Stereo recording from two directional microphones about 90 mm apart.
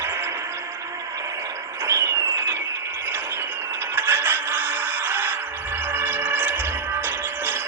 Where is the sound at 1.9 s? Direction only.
30° right (ahead or behind).